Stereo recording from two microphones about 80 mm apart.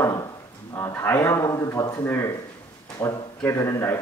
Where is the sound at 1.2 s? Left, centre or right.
Left.